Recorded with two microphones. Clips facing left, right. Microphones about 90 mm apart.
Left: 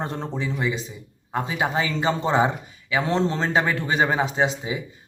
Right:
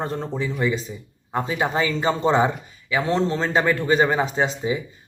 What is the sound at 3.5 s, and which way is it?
Speech, 15° left (ahead or behind).